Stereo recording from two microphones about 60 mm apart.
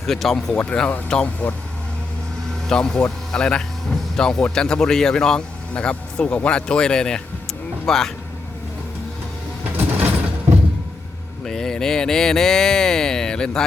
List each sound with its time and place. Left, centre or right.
0.1 s speech: centre
0.5 s speech: left
2.6 s speech: centre
9.6 s sliding door: right
11.4 s speech: centre